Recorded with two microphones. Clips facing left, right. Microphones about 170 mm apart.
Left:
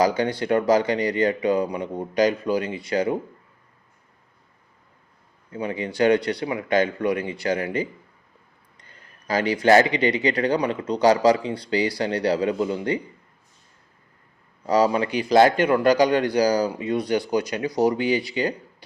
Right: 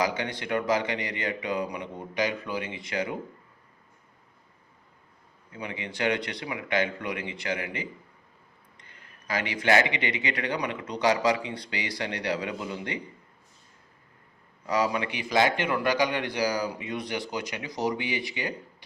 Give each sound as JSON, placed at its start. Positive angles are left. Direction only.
{"t": 0.0, "sound": "a man's voice", "side_deg": 35}
{"t": 5.5, "sound": "a man's voice", "side_deg": 35}
{"t": 14.7, "sound": "a man's voice", "side_deg": 35}